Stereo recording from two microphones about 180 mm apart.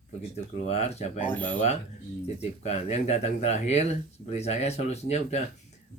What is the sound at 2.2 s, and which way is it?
Speech, 35° left (ahead or behind).